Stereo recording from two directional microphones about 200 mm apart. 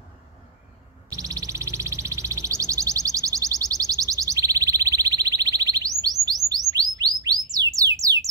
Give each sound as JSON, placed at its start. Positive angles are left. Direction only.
{"t": 1.1, "sound": "music", "side_deg": -15}
{"t": 6.7, "sound": "bird", "side_deg": -20}